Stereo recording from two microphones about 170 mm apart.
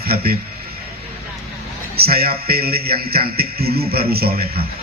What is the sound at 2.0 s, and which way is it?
A man's voice, 65° right (ahead or behind).